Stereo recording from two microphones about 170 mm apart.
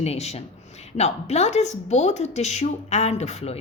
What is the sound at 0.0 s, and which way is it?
A woman's voice, 40° left (ahead or behind).